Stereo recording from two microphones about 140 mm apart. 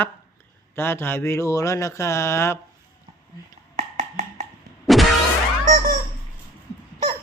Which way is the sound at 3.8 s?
60° right (ahead or behind).